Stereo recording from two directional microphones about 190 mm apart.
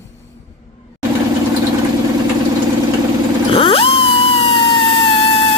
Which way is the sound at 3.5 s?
30° left (ahead or behind).